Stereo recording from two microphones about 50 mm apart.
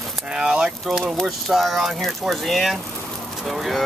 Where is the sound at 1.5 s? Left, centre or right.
Centre.